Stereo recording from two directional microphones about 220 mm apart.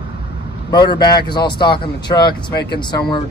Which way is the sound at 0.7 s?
20° left (ahead or behind).